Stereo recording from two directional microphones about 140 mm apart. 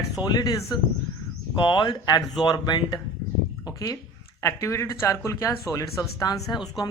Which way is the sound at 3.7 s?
25° left (ahead or behind).